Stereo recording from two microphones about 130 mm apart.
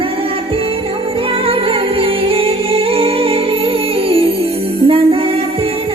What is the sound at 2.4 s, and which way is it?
Music, 45° right (ahead or behind).